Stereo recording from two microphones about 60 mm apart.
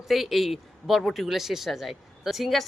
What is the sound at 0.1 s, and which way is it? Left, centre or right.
Speech, centre.